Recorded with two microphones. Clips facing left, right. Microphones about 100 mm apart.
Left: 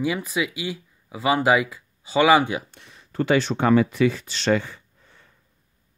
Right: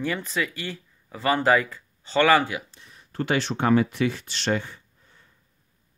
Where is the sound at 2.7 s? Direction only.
70° left (ahead or behind).